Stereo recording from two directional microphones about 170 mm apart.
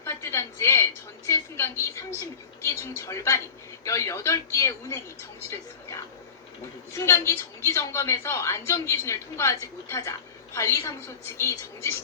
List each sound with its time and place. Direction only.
0.0 s a woman's voice: 15° left (ahead or behind)
6.9 s a woman's voice: 15° left (ahead or behind)